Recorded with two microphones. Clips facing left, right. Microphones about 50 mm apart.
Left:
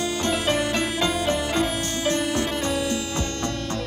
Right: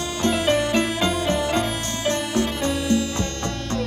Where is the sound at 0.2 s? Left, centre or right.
Centre.